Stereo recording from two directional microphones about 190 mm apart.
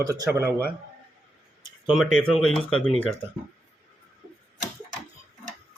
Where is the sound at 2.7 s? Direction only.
30° left (ahead or behind).